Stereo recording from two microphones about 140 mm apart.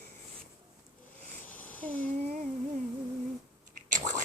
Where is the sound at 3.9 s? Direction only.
60° right (ahead or behind).